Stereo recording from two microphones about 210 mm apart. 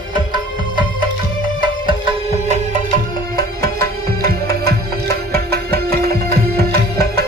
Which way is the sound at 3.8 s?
45° right (ahead or behind).